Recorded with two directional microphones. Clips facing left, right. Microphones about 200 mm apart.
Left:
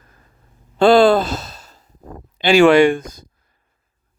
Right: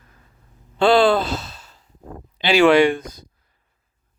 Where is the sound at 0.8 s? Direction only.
45° left (ahead or behind).